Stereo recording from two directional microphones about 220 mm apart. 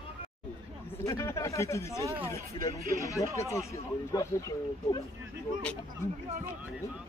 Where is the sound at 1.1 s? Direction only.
15° left (ahead or behind).